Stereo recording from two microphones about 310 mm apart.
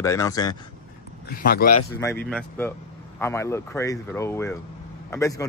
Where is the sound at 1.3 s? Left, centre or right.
Left.